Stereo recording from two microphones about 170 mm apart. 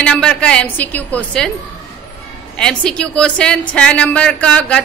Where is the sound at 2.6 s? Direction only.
5° left (ahead or behind).